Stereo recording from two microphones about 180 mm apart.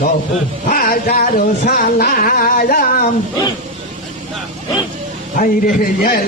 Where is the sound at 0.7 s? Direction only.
50° left (ahead or behind).